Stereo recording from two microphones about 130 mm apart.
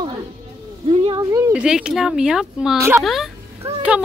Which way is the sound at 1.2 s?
25° right (ahead or behind).